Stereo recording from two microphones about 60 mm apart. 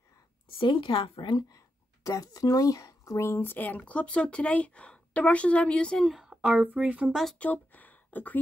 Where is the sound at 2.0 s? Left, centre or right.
Left.